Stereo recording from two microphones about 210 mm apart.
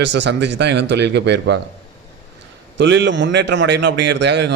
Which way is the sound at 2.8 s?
60° right (ahead or behind).